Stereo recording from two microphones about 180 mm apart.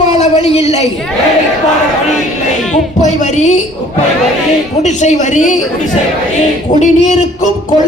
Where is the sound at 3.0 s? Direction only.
40° left (ahead or behind).